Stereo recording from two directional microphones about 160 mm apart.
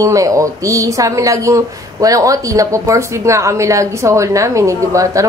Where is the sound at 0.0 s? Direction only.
20° right (ahead or behind).